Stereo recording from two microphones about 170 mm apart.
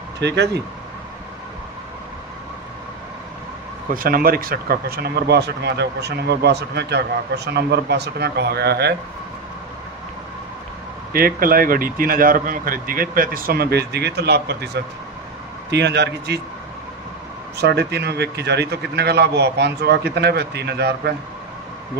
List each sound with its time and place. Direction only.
0.2 s speech: 85° right
3.8 s speech: 55° right (ahead or behind)
11.1 s speech: 60° right (ahead or behind); by 14.8 s 75° right (ahead or behind)
15.7 s speech: 90° right
17.6 s speech: 75° right (ahead or behind)